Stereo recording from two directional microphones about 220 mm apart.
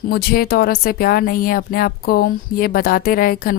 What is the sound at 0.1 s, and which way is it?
Speech, 45° left (ahead or behind).